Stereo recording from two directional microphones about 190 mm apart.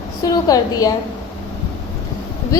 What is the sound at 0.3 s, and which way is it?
Speech, 20° left (ahead or behind).